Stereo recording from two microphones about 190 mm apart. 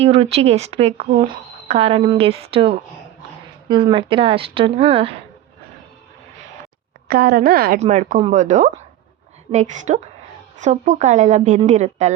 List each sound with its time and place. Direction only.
0.0 s a woman's voice: 30° right (ahead or behind)
7.1 s a woman's voice: 55° right (ahead or behind)
7.8 s speech: 40° right (ahead or behind)